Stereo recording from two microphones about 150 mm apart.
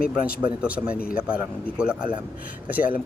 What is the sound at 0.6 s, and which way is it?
Speech, 5° right (ahead or behind).